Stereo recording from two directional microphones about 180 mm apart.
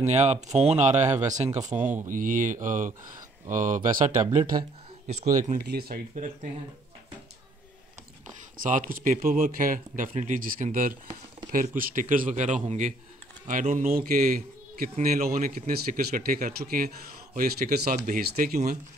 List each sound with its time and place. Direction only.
0.0 s a man's voice: 40° right (ahead or behind)
5.6 s speech: 60° right (ahead or behind)
8.6 s a man's voice: 45° right (ahead or behind)
13.9 s a man's voice: 50° right (ahead or behind)